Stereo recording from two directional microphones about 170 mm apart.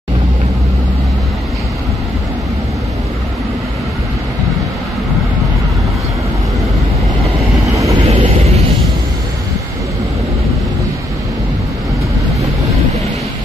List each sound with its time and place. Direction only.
8.0 s vehicle: 35° right (ahead or behind)